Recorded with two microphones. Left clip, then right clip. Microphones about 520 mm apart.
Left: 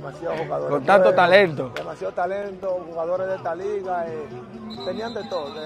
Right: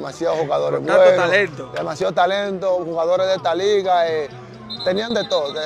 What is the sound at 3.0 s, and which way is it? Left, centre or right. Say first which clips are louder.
Speech: right 7 dB; right.